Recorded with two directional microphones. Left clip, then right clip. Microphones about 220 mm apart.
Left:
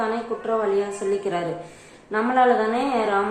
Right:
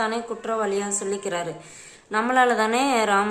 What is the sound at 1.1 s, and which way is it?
A woman's voice, 15° right (ahead or behind).